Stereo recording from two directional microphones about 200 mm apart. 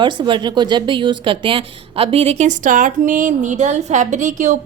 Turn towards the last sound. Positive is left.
turn(degrees=-35)  # may be behind; listen again after turning